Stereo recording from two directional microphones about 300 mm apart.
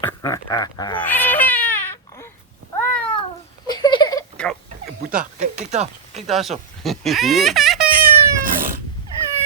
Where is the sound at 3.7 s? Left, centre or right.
Centre.